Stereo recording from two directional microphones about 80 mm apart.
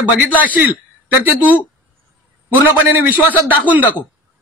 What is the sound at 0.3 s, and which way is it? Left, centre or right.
A man's voice, centre.